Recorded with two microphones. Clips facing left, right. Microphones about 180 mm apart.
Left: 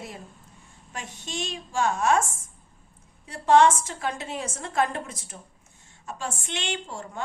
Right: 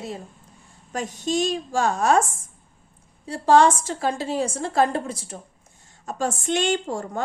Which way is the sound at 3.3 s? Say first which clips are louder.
Right 2 dB; 35° right (ahead or behind).